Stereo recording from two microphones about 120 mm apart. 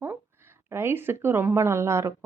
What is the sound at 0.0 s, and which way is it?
A woman's voice, 20° right (ahead or behind).